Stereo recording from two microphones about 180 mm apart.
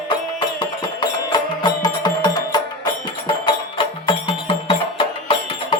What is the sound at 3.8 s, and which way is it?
Music, 30° left (ahead or behind).